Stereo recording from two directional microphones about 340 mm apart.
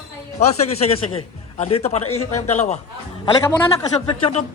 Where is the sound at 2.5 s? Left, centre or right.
Centre.